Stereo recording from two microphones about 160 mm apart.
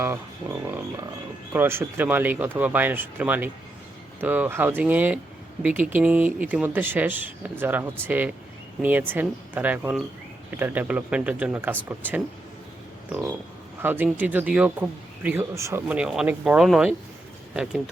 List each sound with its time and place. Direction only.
0.0 s speech: 15° right (ahead or behind)